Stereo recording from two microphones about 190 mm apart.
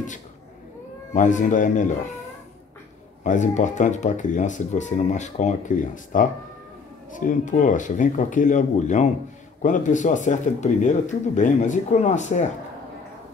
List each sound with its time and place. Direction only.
1.1 s speech: 40° left (ahead or behind)
3.3 s speech: 40° left (ahead or behind)